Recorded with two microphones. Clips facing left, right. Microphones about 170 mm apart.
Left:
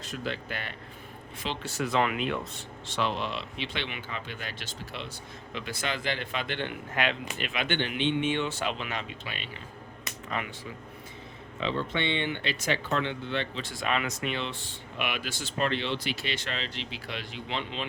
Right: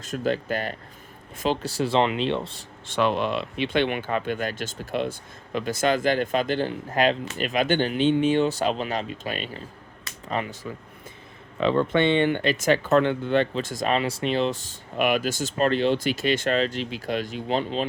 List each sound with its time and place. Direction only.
0.0 s speech: 45° right (ahead or behind)
2.8 s speech: 55° right (ahead or behind); by 10.7 s 35° right (ahead or behind)
11.6 s speech: 50° right (ahead or behind)